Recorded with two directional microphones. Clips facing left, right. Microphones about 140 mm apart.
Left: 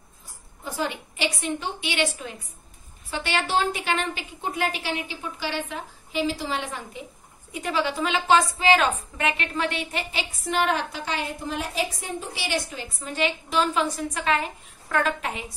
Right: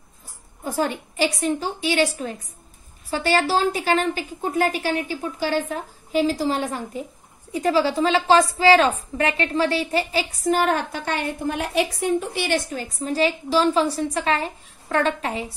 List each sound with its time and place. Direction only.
0.7 s a woman's voice: 45° right (ahead or behind)